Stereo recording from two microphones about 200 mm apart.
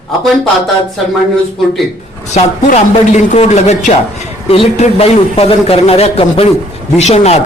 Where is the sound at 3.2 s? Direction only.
35° left (ahead or behind).